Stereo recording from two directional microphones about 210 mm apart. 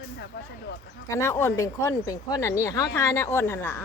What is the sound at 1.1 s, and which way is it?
Speech, 15° left (ahead or behind).